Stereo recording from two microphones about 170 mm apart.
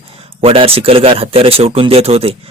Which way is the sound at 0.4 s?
35° right (ahead or behind).